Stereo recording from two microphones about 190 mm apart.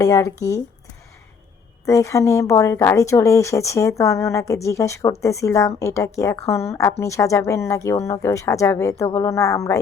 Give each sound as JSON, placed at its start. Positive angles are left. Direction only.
{"t": 0.0, "sound": "speech", "side_deg": 15}
{"t": 1.8, "sound": "speech", "side_deg": 15}